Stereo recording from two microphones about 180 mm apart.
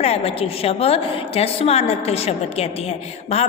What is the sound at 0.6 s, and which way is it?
A woman's voice, 35° left (ahead or behind).